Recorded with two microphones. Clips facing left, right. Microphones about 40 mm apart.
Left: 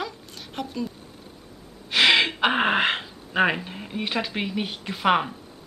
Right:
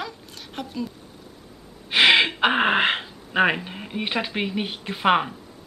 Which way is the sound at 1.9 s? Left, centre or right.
Centre.